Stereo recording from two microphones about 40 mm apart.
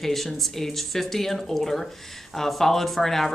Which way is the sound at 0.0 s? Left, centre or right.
Centre.